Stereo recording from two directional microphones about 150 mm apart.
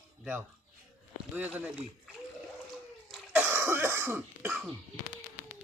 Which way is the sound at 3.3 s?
15° right (ahead or behind).